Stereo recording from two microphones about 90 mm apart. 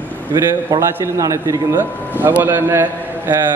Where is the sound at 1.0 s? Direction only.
35° right (ahead or behind).